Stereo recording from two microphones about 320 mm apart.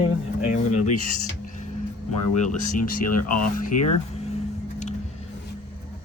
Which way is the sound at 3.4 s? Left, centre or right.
Left.